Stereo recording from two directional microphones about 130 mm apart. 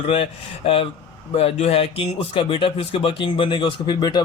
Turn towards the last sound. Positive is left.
turn(degrees=35)  # may be behind; listen again after turning